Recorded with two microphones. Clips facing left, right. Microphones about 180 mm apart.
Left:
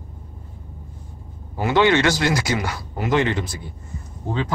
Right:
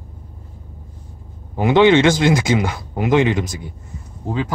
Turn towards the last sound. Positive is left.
turn(degrees=-10)  # may be behind; listen again after turning